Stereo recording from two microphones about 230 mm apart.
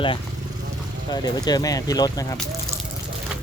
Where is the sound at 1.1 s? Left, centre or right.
Centre.